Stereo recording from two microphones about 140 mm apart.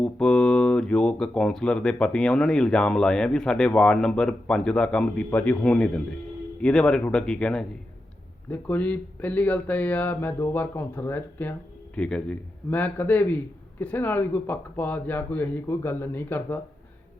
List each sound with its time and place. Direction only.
0.0 s a man's voice: 5° left (ahead or behind)